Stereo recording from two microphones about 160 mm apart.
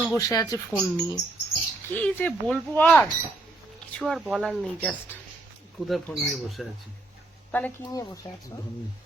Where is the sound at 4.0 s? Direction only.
Centre (ahead or behind).